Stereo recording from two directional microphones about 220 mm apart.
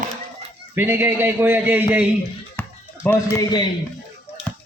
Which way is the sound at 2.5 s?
10° left (ahead or behind).